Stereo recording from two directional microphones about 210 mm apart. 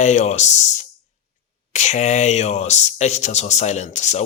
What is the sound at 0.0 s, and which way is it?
A man's voice, 35° left (ahead or behind).